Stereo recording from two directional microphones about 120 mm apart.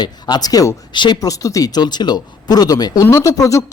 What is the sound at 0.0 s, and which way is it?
Speech, 35° left (ahead or behind).